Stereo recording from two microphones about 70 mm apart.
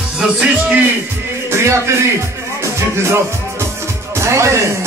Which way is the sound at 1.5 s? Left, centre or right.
Right.